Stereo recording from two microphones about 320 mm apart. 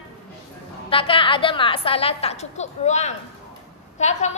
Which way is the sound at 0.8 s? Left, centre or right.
Centre.